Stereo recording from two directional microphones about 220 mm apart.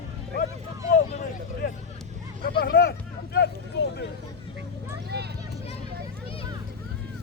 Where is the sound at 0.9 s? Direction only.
40° left (ahead or behind).